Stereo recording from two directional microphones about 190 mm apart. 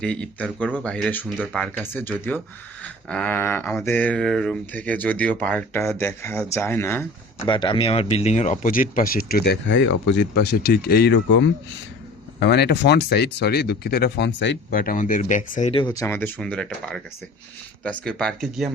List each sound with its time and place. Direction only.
0.0 s speech: 5° left (ahead or behind)
7.3 s speech: 25° left (ahead or behind); by 14.6 s 70° left (ahead or behind)
14.7 s speech: 45° left (ahead or behind)
15.8 s speech: 20° left (ahead or behind); by 18.7 s centre (ahead or behind)